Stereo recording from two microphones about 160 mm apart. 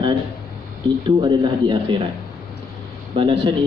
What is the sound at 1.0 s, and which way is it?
Speech, 30° right (ahead or behind).